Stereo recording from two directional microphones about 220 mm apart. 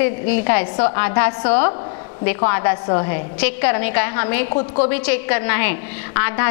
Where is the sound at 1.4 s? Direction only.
25° left (ahead or behind).